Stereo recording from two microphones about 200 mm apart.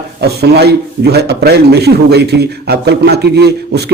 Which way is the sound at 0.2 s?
55° right (ahead or behind).